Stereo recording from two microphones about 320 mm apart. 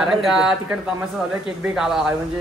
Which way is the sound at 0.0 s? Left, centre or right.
Centre.